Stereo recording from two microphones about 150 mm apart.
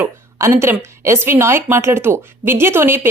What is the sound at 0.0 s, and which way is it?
A woman's voice, 20° right (ahead or behind).